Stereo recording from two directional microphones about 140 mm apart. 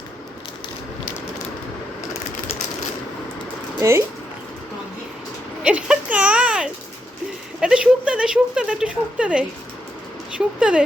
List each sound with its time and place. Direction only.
3.8 s speech: 20° right (ahead or behind)
5.6 s a sound: 10° right (ahead or behind)
7.6 s speech: 5° right (ahead or behind)